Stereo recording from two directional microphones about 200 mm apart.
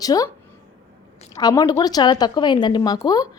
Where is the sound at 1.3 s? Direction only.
20° left (ahead or behind).